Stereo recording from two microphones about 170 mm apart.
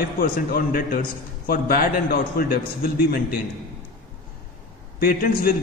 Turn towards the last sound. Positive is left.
turn(degrees=60)  # may be behind; listen again after turning